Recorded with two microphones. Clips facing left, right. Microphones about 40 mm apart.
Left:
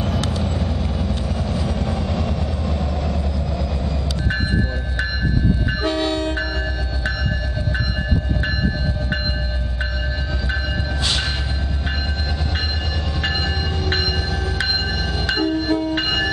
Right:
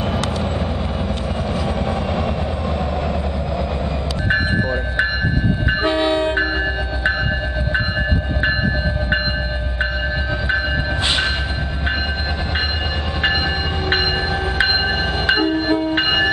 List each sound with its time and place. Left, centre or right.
0.4 s vehicle: right
5.7 s train: right
13.8 s train: right